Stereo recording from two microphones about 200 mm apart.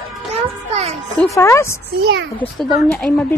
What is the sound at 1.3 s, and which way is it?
Speech, 15° left (ahead or behind).